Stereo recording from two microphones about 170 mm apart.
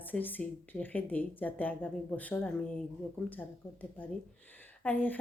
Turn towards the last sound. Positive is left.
turn(degrees=10)  # may be behind; listen again after turning